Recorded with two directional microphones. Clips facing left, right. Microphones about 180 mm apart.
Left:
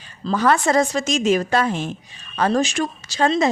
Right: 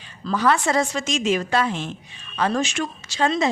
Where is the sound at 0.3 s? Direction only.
45° left (ahead or behind).